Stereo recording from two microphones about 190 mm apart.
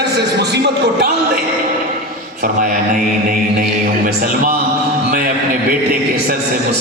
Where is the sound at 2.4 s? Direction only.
45° right (ahead or behind).